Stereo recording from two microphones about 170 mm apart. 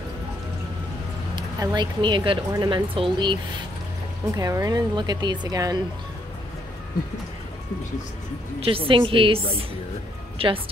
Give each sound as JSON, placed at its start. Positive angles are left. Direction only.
{"t": 1.3, "sound": "speech", "side_deg": -25}
{"t": 8.5, "sound": "a woman's voice", "side_deg": -35}
{"t": 10.4, "sound": "a woman's voice", "side_deg": -35}